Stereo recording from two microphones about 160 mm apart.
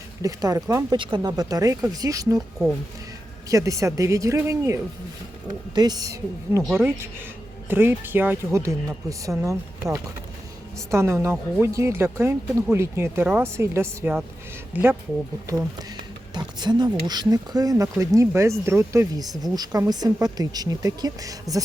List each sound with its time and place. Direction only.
0.2 s speech: 20° right (ahead or behind)
3.5 s speech: 20° right (ahead or behind)
16.3 s speech: 25° right (ahead or behind)